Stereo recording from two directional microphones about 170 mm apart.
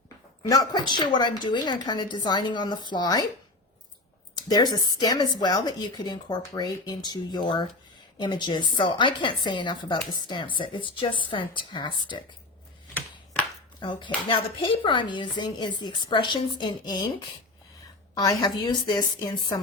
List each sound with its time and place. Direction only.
0.4 s speech: 20° left (ahead or behind)
4.4 s speech: 25° left (ahead or behind)
13.7 s speech: 30° left (ahead or behind)